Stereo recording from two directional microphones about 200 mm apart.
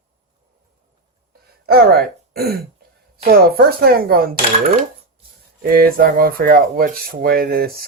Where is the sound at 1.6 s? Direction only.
50° right (ahead or behind).